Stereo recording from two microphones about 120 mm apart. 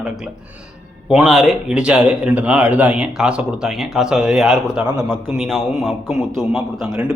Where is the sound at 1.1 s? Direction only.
5° right (ahead or behind).